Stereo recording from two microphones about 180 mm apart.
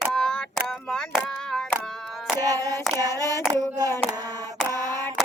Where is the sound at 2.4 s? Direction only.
20° right (ahead or behind).